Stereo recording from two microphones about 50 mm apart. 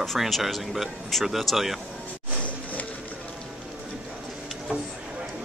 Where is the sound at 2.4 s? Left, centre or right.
Left.